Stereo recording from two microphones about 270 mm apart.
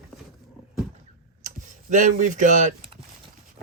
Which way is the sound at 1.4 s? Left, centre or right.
Right.